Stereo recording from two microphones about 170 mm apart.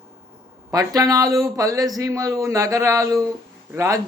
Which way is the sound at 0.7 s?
20° right (ahead or behind).